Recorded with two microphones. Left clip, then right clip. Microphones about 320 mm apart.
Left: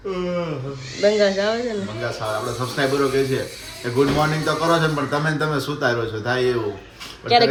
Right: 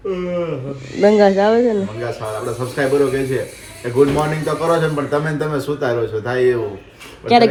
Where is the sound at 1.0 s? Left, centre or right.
Right.